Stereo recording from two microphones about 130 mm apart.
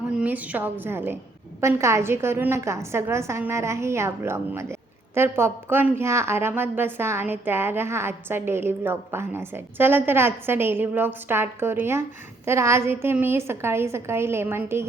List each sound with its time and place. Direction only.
0.1 s a woman's voice: 10° right (ahead or behind)